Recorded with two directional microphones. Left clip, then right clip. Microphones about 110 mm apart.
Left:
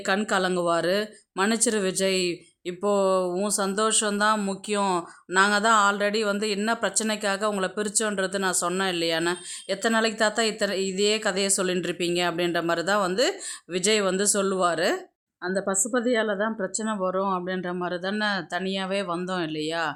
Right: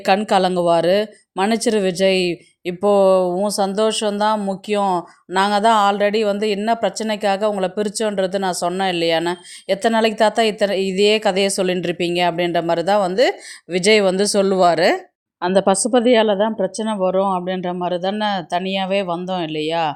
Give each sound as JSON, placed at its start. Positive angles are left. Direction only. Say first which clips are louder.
{"t": 0.3, "sound": "a woman's voice", "louder": "right 8 dB", "side_deg": -40}
{"t": 5.3, "sound": "a woman's voice", "louder": "right 5 dB", "side_deg": -35}
{"t": 15.4, "sound": "a woman's voice", "louder": "right 11 dB", "side_deg": -60}